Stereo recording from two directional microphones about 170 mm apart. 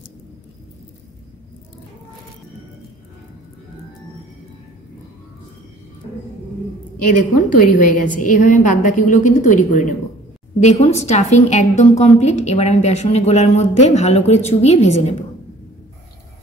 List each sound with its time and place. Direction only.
7.1 s a woman's voice: 50° left (ahead or behind)